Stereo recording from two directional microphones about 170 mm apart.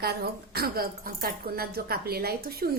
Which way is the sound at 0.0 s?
65° right (ahead or behind).